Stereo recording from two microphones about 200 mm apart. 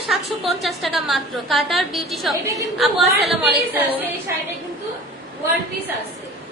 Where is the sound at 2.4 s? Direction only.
15° right (ahead or behind).